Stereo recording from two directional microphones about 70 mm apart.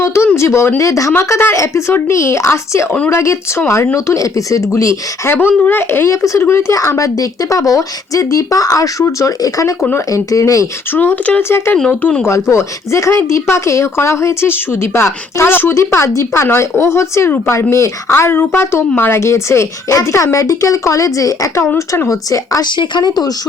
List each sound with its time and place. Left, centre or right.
0.0 s a sound: left
0.3 s speech: left
1.1 s speech: left
5.6 s speech: left
6.1 s speech: left
10.9 s speech: left
11.4 s speech: left
11.9 s speech: left
12.2 s speech: left
22.6 s speech: left